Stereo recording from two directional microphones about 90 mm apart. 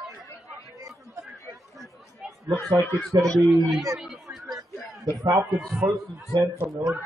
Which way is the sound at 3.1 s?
40° right (ahead or behind).